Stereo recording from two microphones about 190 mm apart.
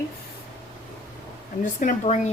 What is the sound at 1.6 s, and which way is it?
Speech, 40° left (ahead or behind).